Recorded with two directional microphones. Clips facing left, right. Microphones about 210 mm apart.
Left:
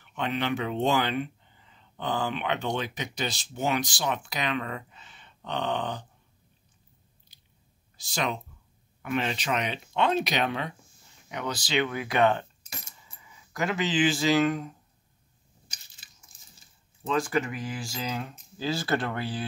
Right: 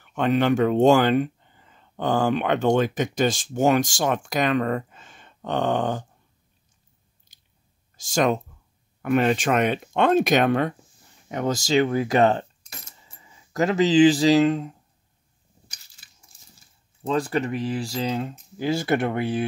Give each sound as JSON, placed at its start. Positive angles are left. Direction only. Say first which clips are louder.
{"t": 0.0, "sound": "speech", "louder": "right 9 dB", "side_deg": -45}
{"t": 7.3, "sound": "biting", "louder": "left 2 dB", "side_deg": -45}
{"t": 8.0, "sound": "speech", "louder": "right 9 dB", "side_deg": -45}
{"t": 17.0, "sound": "speech", "louder": "right 3 dB", "side_deg": -35}